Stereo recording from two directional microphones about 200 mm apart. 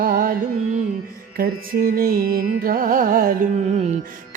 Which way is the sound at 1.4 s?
50° right (ahead or behind).